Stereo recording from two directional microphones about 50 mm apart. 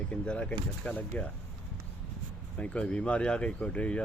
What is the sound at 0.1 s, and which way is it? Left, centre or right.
Speech, left.